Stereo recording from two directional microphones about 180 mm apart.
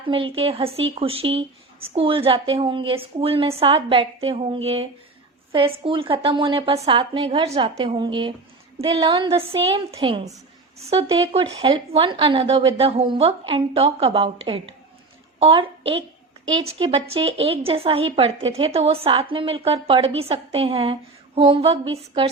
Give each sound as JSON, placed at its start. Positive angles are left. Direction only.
{"t": 0.1, "sound": "a woman's voice", "side_deg": -30}